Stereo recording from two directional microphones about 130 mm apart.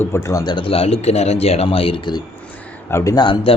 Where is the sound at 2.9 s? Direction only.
20° left (ahead or behind).